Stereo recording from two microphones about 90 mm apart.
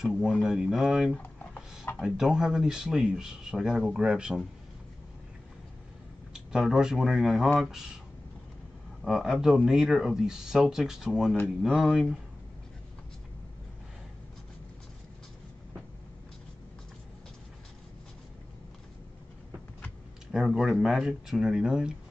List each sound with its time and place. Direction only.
0.0 s speech: 5° right (ahead or behind)
1.1 s a sound: 15° left (ahead or behind)
2.0 s speech: 5° right (ahead or behind)
6.5 s speech: 5° right (ahead or behind)
9.0 s speech: 5° right (ahead or behind)
20.2 s speech: 5° right (ahead or behind)